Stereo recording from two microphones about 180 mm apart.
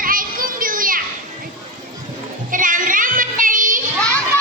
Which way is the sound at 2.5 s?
50° right (ahead or behind).